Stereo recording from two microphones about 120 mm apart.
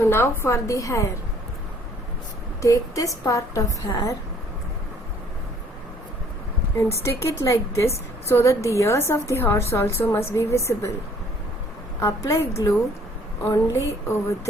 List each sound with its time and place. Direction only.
0.0 s a woman's voice: 20° left (ahead or behind)
2.6 s a woman's voice: 25° left (ahead or behind)
6.7 s a woman's voice: 25° left (ahead or behind)
11.9 s a woman's voice: 25° left (ahead or behind)